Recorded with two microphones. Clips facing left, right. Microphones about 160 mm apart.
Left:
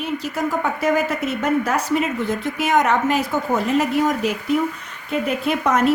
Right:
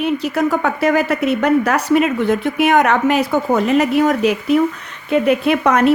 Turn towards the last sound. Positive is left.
turn(degrees=-65)  # may be behind; listen again after turning